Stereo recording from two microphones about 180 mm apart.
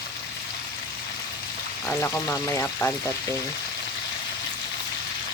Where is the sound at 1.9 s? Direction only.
10° left (ahead or behind).